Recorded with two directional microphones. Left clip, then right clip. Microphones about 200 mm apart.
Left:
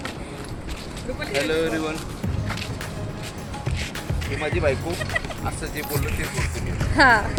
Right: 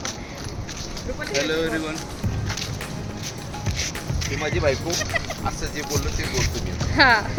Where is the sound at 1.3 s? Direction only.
10° left (ahead or behind).